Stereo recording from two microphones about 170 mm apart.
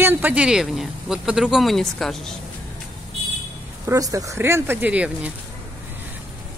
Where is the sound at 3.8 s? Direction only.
20° right (ahead or behind).